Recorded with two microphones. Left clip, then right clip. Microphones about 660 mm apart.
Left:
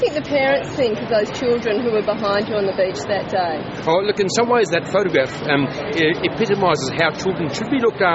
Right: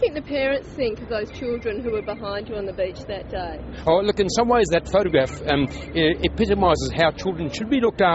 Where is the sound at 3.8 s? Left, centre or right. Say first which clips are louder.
Left 1 dB; right.